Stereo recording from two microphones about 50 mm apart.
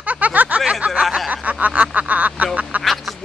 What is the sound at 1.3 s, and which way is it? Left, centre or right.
Speech, right.